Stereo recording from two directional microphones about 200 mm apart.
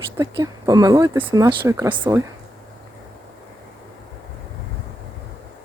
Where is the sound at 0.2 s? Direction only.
20° right (ahead or behind).